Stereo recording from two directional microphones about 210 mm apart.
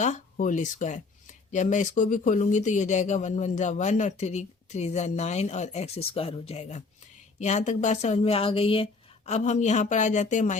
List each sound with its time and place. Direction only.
0.0 s speech: 35° left (ahead or behind)